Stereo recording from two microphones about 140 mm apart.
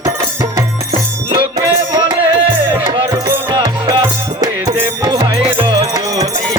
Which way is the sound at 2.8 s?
35° right (ahead or behind).